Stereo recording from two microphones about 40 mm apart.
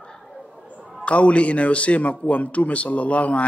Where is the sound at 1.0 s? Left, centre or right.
Left.